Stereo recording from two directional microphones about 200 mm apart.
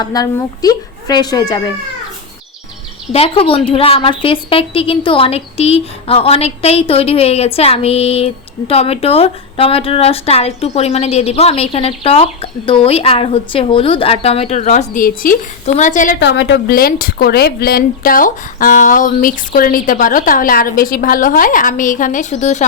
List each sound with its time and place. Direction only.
0.0 s a woman's voice: 20° left (ahead or behind)
3.1 s a woman's voice: 30° left (ahead or behind)
16.2 s speech: 60° left (ahead or behind); by 22.6 s 35° left (ahead or behind)